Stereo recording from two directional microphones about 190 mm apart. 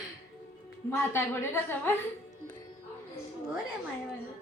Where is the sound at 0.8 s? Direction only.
10° left (ahead or behind).